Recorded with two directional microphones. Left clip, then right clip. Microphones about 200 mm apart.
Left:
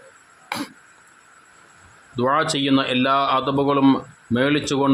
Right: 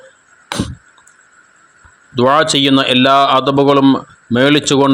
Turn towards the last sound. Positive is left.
turn(degrees=-30)  # may be behind; listen again after turning